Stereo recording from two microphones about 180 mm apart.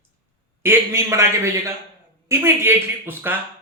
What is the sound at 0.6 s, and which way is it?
A man's voice, 15° right (ahead or behind).